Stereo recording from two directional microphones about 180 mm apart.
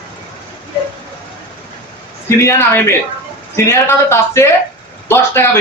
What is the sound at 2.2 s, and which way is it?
A man's voice, 15° left (ahead or behind).